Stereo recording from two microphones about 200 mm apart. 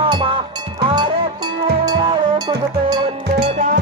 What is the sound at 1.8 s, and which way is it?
Music, 20° right (ahead or behind).